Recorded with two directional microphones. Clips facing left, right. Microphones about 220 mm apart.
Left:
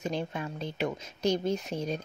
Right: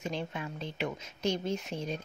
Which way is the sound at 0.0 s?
40° left (ahead or behind).